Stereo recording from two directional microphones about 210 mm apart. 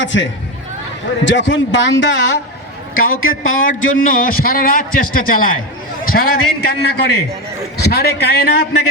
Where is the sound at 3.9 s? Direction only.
40° left (ahead or behind).